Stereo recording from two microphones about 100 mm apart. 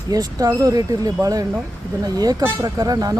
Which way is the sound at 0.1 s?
40° right (ahead or behind).